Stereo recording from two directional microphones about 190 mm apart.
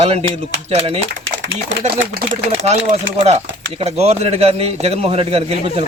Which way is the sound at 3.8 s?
35° right (ahead or behind).